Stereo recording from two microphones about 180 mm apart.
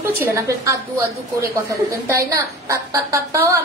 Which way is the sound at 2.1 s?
15° right (ahead or behind).